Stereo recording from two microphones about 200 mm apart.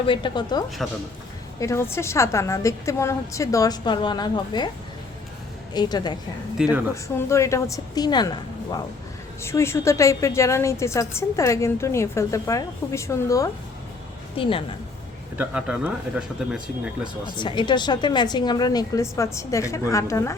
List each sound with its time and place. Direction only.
0.1 s a woman's voice: 25° left (ahead or behind)
0.8 s speech: centre (ahead or behind)
1.5 s a woman's voice: 15° left (ahead or behind)
5.7 s a woman's voice: 20° left (ahead or behind)
6.6 s a woman's voice: 5° right (ahead or behind)
6.9 s a woman's voice: 15° left (ahead or behind)
9.4 s a woman's voice: 15° left (ahead or behind)
14.4 s a woman's voice: 25° left (ahead or behind)
15.4 s speech: 5° right (ahead or behind)
17.3 s a woman's voice: 25° left (ahead or behind)